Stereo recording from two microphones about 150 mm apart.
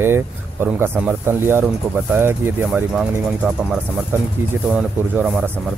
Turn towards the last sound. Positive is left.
turn(degrees=-10)  # may be behind; listen again after turning